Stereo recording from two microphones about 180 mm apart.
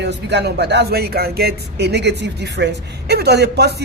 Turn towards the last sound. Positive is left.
turn(degrees=-65)  # may be behind; listen again after turning